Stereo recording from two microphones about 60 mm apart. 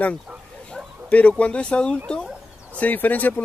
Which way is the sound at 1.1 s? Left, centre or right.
Left.